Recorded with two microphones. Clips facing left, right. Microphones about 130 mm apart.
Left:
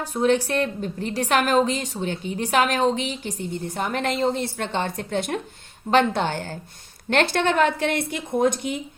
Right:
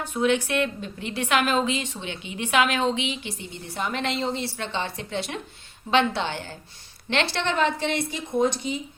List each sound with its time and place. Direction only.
0.0 s a woman's voice: 35° left (ahead or behind); by 8.8 s 55° left (ahead or behind)